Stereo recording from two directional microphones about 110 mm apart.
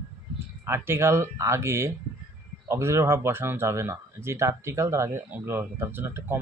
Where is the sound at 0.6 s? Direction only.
25° right (ahead or behind).